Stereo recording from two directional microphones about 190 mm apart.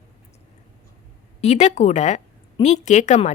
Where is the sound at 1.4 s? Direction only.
35° left (ahead or behind).